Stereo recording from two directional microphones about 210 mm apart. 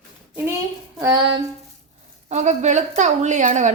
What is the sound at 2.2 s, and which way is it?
A woman's voice, 35° right (ahead or behind).